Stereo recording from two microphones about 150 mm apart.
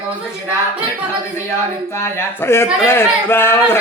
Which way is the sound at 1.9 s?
15° left (ahead or behind).